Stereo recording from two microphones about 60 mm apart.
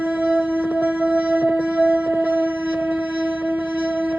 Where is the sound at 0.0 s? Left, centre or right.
Right.